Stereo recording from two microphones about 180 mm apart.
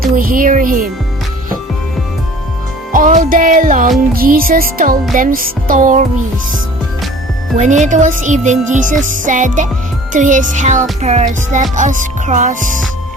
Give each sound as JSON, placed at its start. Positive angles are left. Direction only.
{"t": 0.0, "sound": "music", "side_deg": -55}
{"t": 2.9, "sound": "music", "side_deg": -50}
{"t": 7.5, "sound": "music", "side_deg": -40}